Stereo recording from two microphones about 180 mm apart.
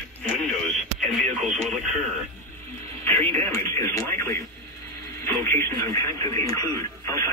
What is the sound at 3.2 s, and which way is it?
Radio, 35° right (ahead or behind).